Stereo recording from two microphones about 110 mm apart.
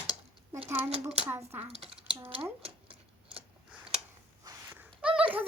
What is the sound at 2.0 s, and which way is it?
Speech, 55° right (ahead or behind).